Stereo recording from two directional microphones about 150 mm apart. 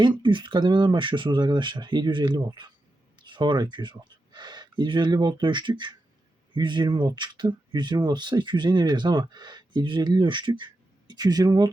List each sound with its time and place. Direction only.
0.2 s speech: 30° right (ahead or behind)